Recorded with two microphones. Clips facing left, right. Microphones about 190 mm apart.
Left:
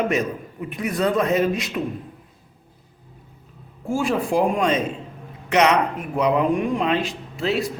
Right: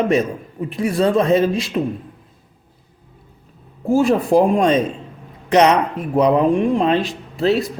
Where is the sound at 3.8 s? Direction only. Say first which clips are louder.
Right 7 dB; 40° right (ahead or behind).